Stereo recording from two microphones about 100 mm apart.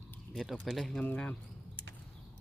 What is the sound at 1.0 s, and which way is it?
Speech, 15° left (ahead or behind).